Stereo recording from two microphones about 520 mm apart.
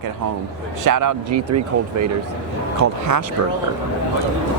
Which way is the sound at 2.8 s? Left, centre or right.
Right.